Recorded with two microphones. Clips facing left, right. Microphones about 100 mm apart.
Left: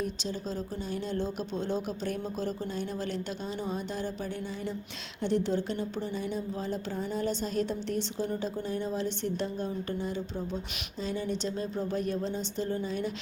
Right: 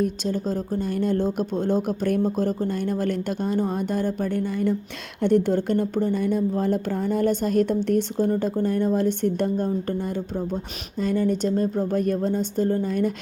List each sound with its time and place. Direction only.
0.0 s speech: 50° right (ahead or behind)